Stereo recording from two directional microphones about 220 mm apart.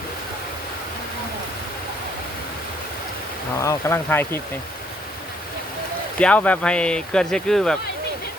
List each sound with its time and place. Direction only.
3.6 s speech: 10° left (ahead or behind)
6.1 s speech: 5° left (ahead or behind)